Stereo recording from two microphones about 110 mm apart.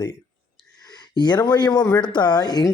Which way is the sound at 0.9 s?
40° left (ahead or behind).